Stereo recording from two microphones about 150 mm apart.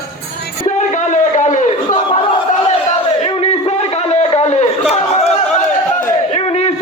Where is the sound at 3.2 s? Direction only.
45° left (ahead or behind).